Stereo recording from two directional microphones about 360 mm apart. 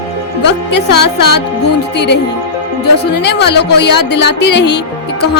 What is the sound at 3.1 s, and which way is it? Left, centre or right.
A woman's voice, left.